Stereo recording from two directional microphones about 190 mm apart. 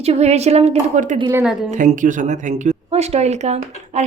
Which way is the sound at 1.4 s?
5° right (ahead or behind).